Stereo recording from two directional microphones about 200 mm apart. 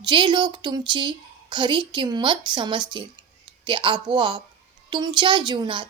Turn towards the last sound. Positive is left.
turn(degrees=-25)  # may be behind; listen again after turning